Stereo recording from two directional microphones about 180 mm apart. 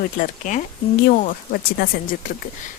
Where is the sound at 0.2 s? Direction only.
45° left (ahead or behind).